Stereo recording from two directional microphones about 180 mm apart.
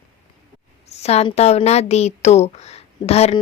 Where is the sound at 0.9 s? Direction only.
35° left (ahead or behind).